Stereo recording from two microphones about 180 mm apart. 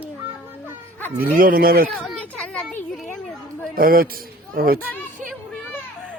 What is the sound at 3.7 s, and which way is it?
A man's voice, 55° right (ahead or behind).